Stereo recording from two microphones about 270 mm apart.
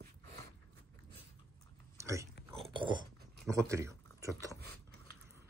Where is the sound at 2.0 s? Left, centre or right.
Centre.